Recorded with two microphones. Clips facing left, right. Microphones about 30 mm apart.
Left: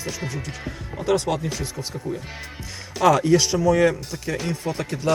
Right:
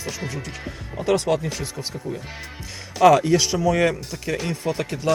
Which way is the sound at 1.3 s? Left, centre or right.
Centre.